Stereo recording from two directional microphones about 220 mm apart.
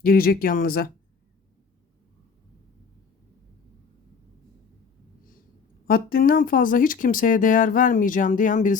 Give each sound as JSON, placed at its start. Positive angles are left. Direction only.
{"t": 0.0, "sound": "speech", "side_deg": 40}
{"t": 5.9, "sound": "speech", "side_deg": 40}